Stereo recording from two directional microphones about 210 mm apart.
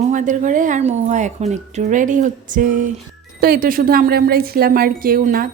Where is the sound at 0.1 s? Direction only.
35° right (ahead or behind).